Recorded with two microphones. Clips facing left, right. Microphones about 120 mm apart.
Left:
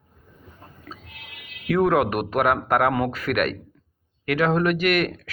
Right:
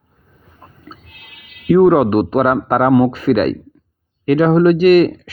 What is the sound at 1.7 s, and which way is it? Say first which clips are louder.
Speech: right 9 dB; 30° right (ahead or behind).